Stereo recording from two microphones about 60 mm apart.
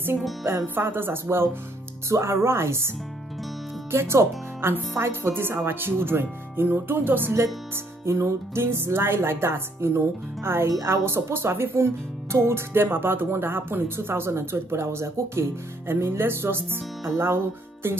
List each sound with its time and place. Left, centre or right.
0.7 s speech: right
2.0 s speech: right
3.9 s speech: right
7.7 s speech: right